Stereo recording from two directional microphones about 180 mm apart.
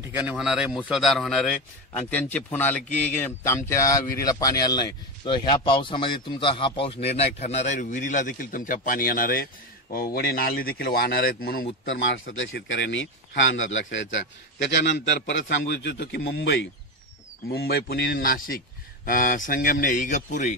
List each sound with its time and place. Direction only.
0.2 s a man's voice: 5° right (ahead or behind); by 11.6 s 55° left (ahead or behind)
11.8 s a man's voice: 90° left
17.5 s a man's voice: 60° left (ahead or behind); by 20.5 s 45° left (ahead or behind)